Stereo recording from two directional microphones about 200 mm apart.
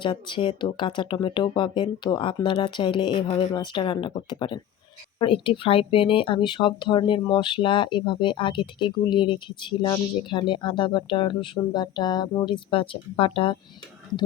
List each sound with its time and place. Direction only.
0.0 s speech: 25° left (ahead or behind)